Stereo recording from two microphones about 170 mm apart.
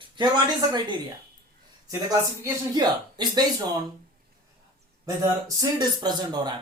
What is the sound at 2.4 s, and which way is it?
Speech, 25° right (ahead or behind).